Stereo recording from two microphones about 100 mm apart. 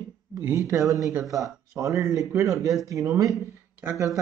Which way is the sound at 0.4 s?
30° right (ahead or behind).